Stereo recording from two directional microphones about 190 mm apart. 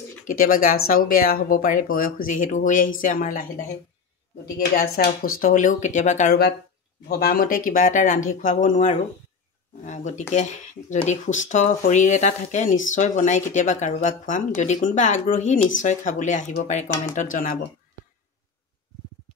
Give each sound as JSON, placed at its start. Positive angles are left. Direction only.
{"t": 0.3, "sound": "speech", "side_deg": 50}
{"t": 4.6, "sound": "speech", "side_deg": 55}
{"t": 7.1, "sound": "speech", "side_deg": 55}